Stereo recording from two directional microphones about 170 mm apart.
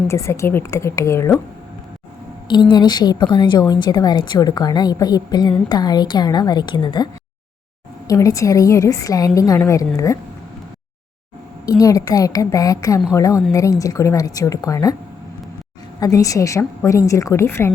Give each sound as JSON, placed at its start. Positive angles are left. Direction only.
{"t": 0.1, "sound": "a woman's voice", "side_deg": 15}
{"t": 2.5, "sound": "a woman's voice", "side_deg": 25}
{"t": 11.6, "sound": "a woman's voice", "side_deg": 20}
{"t": 16.0, "sound": "a woman's voice", "side_deg": 20}